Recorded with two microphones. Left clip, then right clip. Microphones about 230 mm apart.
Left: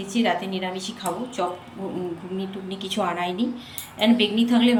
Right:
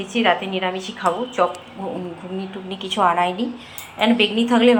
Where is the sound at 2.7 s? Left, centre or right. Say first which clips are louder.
Right 8 dB; centre.